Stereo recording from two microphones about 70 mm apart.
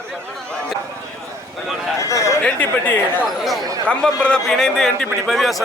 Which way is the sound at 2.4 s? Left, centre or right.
Left.